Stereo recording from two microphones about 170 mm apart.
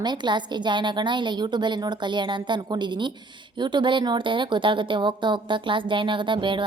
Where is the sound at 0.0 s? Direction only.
25° right (ahead or behind).